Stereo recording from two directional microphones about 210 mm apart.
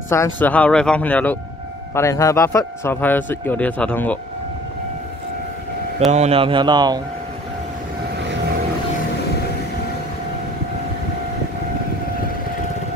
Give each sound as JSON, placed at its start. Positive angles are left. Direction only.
{"t": 0.1, "sound": "a man's voice", "side_deg": 10}
{"t": 6.1, "sound": "speech", "side_deg": -30}